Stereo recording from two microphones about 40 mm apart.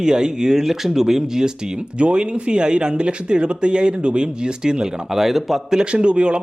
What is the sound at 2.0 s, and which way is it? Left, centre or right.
Speech, right.